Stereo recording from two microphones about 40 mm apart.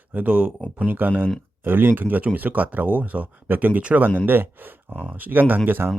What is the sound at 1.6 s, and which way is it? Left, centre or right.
Speech, right.